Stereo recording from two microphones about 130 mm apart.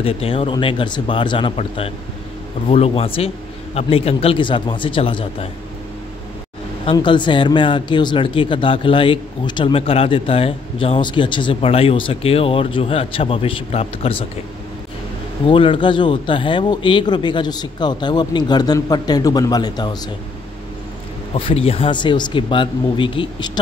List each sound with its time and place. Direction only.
0.0 s speech: 45° left (ahead or behind)
2.7 s speech: 50° left (ahead or behind)
6.9 s speech: 40° left (ahead or behind)
15.4 s speech: 40° left (ahead or behind)
21.4 s speech: 45° left (ahead or behind)